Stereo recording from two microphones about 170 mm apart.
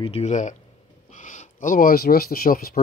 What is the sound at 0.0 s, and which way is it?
Speech, 40° left (ahead or behind).